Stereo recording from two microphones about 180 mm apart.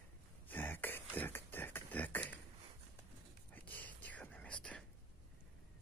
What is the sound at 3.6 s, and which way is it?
Whispering, 10° left (ahead or behind).